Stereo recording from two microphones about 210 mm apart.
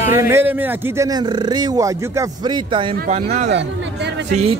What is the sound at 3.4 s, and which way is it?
Chatter, 55° right (ahead or behind).